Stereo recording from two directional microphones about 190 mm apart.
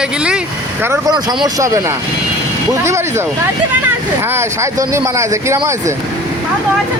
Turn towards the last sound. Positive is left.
turn(degrees=-15)  # may be behind; listen again after turning